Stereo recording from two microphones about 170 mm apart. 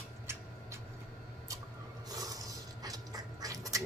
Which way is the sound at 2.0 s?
20° right (ahead or behind).